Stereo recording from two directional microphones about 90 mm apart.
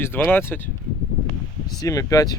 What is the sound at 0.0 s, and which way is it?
Speech, 25° left (ahead or behind).